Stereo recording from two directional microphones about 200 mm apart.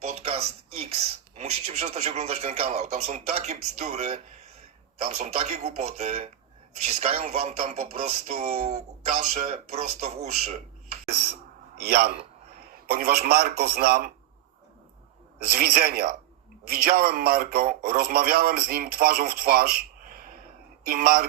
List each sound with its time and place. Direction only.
0.0 s speech: 30° right (ahead or behind)
11.8 s a man's voice: 50° right (ahead or behind)
15.4 s a man's voice: 50° right (ahead or behind)